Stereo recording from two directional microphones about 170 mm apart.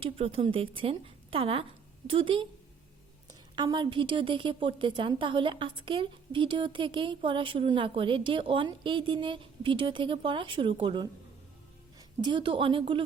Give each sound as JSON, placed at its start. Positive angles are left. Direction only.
{"t": 0.2, "sound": "a woman's voice", "side_deg": -35}
{"t": 3.5, "sound": "a woman's voice", "side_deg": -25}
{"t": 12.2, "sound": "a woman's voice", "side_deg": -30}